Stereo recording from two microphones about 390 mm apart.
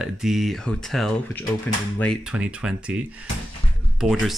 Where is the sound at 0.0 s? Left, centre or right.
Centre.